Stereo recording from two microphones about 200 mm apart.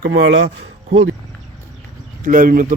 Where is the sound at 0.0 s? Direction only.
55° right (ahead or behind).